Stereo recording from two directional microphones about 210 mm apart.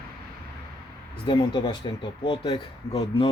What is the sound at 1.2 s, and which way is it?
Speech, 20° left (ahead or behind).